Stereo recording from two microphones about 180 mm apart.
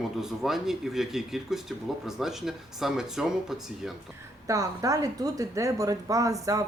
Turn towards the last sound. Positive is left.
turn(degrees=-20)  # may be behind; listen again after turning